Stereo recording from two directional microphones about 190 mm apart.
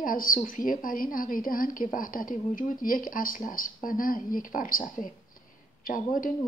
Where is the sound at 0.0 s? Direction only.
50° left (ahead or behind).